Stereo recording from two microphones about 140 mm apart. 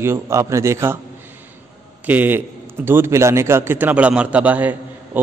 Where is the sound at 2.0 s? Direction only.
15° right (ahead or behind).